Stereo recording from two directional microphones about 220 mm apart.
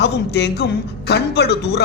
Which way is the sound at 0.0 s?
50° left (ahead or behind).